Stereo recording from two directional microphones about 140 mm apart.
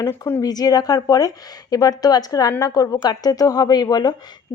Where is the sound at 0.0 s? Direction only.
20° left (ahead or behind).